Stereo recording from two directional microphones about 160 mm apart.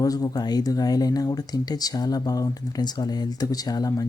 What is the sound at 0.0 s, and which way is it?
Speech, 20° left (ahead or behind).